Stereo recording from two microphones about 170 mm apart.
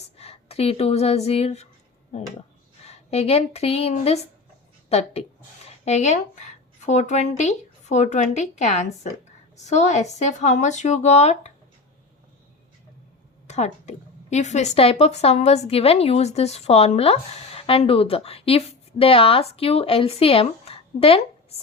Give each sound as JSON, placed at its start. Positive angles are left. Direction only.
{"t": 0.2, "sound": "speech", "side_deg": 35}
{"t": 2.8, "sound": "a woman's voice", "side_deg": 40}
{"t": 13.5, "sound": "a woman's voice", "side_deg": 40}